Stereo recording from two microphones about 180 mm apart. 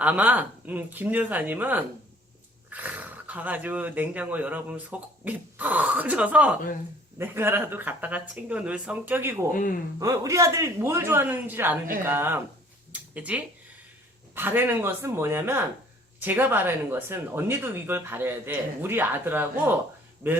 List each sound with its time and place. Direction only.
0.0 s speech: 10° right (ahead or behind)
9.5 s speech: 50° left (ahead or behind)
10.0 s speech: 15° right (ahead or behind)
12.9 s a sound: 5° right (ahead or behind)
14.3 s speech: 10° right (ahead or behind)